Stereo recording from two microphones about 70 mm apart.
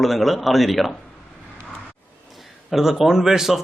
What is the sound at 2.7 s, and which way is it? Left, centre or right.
Speech, centre.